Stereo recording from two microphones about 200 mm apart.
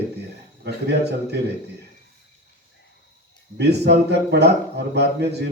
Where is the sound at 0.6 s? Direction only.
60° right (ahead or behind).